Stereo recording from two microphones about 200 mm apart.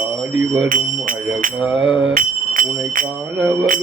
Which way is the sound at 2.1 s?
45° right (ahead or behind).